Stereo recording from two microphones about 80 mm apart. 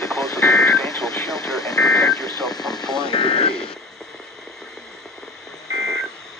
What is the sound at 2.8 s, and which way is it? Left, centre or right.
Vehicle, centre.